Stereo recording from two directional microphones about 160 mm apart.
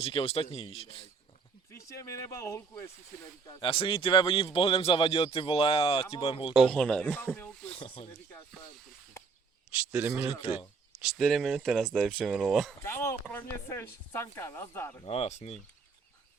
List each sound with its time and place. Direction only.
0.0 s speech: 35° left (ahead or behind)
1.7 s speech: 20° left (ahead or behind)
3.6 s speech: 35° left (ahead or behind)
6.5 s speech: centre (ahead or behind)
7.7 s speech: 35° left (ahead or behind)
9.9 s a man's voice: 10° right (ahead or behind)
11.0 s speech: centre (ahead or behind)
12.8 s speech: 15° left (ahead or behind)
15.0 s speech: 35° left (ahead or behind)